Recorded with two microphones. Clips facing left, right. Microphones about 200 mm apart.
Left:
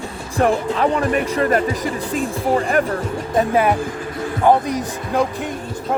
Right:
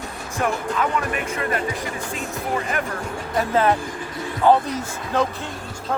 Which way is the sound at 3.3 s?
15° left (ahead or behind).